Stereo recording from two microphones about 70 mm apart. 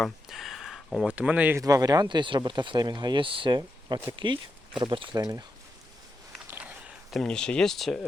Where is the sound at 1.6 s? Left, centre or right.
Right.